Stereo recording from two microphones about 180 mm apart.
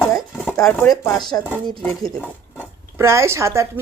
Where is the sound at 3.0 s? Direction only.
15° right (ahead or behind).